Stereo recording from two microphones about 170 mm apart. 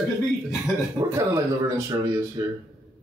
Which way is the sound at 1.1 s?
20° right (ahead or behind).